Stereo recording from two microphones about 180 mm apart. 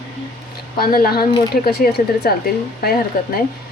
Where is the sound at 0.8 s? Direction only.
55° left (ahead or behind).